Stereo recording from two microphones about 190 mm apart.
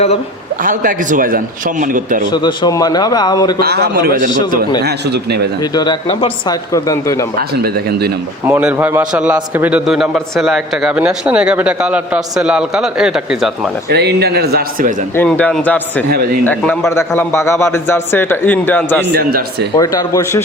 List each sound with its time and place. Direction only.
0.6 s a man's voice: 45° right (ahead or behind)
2.3 s a man's voice: 20° left (ahead or behind)
3.6 s a man's voice: 55° right (ahead or behind)
5.7 s a man's voice: 25° left (ahead or behind)
6.7 s a man's voice: 15° left (ahead or behind)
7.3 s a man's voice: 55° right (ahead or behind)
8.4 s a man's voice: 10° right (ahead or behind)
13.9 s a man's voice: 60° right (ahead or behind)
15.1 s a man's voice: 10° left (ahead or behind)
16.0 s a man's voice: 55° right (ahead or behind)
16.4 s a man's voice: 10° left (ahead or behind)
19.0 s a man's voice: 60° right (ahead or behind)
19.7 s a man's voice: 20° left (ahead or behind)